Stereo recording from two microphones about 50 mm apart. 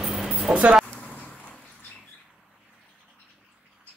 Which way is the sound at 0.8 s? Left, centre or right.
Centre.